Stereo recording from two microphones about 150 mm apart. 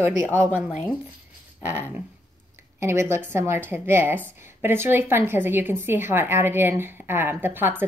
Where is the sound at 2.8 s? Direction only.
15° right (ahead or behind).